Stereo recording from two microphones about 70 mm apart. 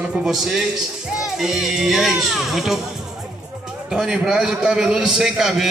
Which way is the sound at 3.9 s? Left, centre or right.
Centre.